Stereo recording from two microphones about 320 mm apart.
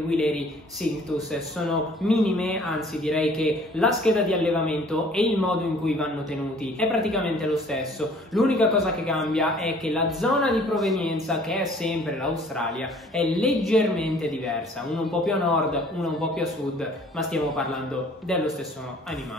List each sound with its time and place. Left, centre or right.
1.3 s speech: centre